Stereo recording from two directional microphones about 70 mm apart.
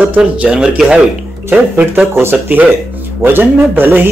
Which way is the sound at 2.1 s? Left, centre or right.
Right.